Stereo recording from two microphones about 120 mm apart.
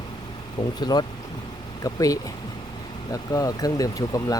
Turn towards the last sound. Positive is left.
turn(degrees=30)  # may be behind; listen again after turning